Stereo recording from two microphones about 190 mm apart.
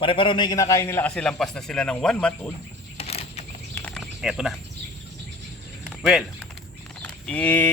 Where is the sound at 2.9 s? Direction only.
30° left (ahead or behind).